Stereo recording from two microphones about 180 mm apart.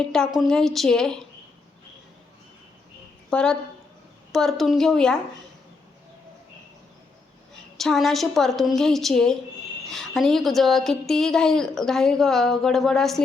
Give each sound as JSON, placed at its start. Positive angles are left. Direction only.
{"t": 0.0, "sound": "a woman's voice", "side_deg": 5}
{"t": 3.2, "sound": "a woman's voice", "side_deg": 5}
{"t": 7.8, "sound": "a woman's voice", "side_deg": 0}